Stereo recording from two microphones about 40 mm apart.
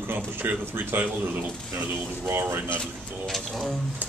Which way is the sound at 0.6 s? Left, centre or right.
Right.